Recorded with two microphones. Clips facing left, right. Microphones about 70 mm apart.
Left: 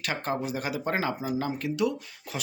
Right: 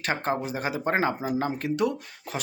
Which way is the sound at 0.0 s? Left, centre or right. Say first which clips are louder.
Right 3 dB; right.